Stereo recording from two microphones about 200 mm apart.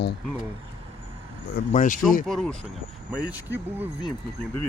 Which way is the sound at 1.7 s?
40° left (ahead or behind).